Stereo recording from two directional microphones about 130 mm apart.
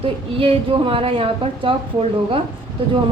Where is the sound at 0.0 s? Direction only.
45° right (ahead or behind).